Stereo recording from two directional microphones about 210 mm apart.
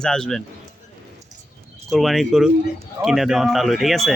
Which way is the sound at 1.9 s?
Centre (ahead or behind).